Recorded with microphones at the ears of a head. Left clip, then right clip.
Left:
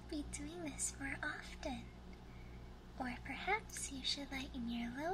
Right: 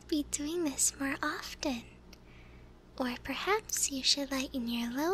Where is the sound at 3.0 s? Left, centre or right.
Right.